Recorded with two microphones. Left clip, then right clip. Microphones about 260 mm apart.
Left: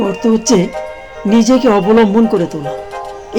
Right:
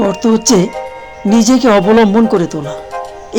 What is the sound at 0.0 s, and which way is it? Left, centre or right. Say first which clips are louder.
Speech: right 2 dB; centre.